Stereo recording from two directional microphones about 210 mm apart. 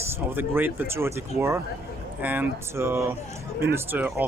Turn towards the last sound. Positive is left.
turn(degrees=-10)  # may be behind; listen again after turning